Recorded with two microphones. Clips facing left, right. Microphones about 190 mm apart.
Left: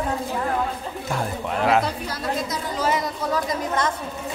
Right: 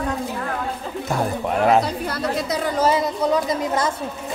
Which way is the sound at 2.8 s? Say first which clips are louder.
Right 4 dB; 25° right (ahead or behind).